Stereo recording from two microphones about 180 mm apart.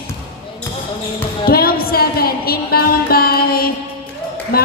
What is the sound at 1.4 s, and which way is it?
Music, 55° left (ahead or behind).